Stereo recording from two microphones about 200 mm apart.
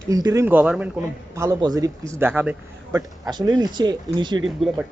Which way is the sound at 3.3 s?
20° right (ahead or behind).